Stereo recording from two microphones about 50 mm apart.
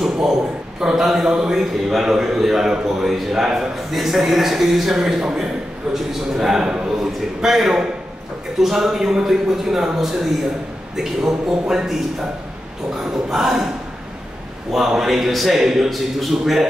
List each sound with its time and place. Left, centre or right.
0.0 s a man's voice: centre
13.3 s a man's voice: centre
14.7 s a man's voice: centre